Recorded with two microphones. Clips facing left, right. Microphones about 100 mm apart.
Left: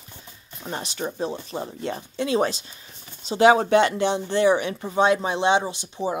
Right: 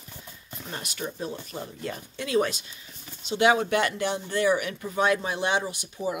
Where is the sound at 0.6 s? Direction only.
30° left (ahead or behind).